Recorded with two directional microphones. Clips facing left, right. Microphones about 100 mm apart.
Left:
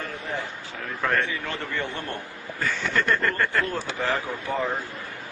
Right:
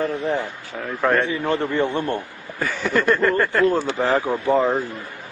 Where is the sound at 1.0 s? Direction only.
20° right (ahead or behind).